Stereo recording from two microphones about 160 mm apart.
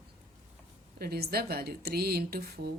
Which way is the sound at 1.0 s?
75° right (ahead or behind).